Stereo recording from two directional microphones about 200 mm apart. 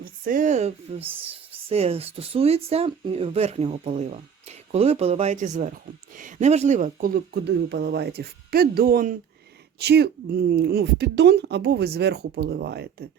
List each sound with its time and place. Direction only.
0.0 s a woman's voice: 40° right (ahead or behind)